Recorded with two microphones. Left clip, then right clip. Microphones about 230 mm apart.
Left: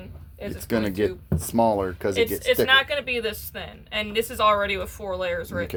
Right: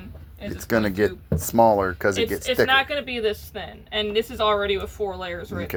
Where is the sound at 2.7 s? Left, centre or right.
Left.